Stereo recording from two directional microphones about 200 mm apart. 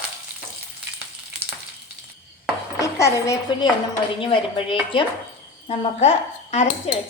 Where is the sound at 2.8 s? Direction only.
15° left (ahead or behind).